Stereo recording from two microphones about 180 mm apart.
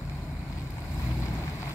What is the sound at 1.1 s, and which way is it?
Boat, 15° left (ahead or behind).